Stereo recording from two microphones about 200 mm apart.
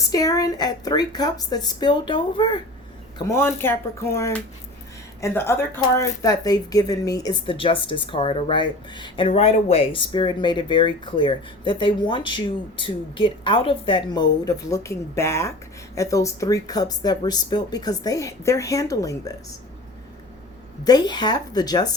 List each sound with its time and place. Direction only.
0.1 s speech: 15° left (ahead or behind)
3.2 s speech: 15° left (ahead or behind)
20.8 s speech: 20° left (ahead or behind)